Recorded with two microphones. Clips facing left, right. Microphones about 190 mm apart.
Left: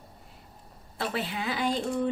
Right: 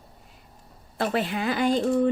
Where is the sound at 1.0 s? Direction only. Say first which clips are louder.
Right 6 dB; 50° right (ahead or behind).